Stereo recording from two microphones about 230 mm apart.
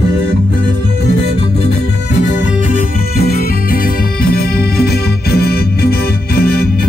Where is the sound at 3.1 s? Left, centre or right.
Left.